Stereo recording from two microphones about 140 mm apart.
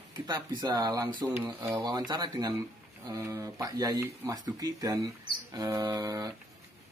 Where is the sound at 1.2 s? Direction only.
15° right (ahead or behind).